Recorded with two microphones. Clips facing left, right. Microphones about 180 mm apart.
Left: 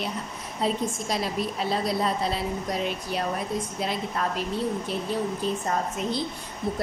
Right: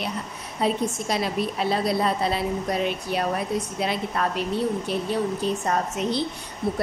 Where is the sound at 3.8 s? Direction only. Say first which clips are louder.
Right 3 dB; 65° right (ahead or behind).